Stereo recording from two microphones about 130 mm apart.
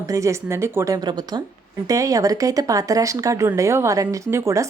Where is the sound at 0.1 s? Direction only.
25° right (ahead or behind).